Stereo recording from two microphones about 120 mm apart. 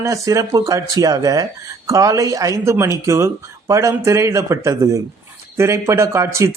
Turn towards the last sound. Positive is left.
turn(degrees=-25)  # may be behind; listen again after turning